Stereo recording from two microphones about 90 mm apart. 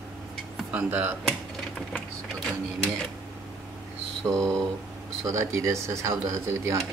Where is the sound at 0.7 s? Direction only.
15° right (ahead or behind).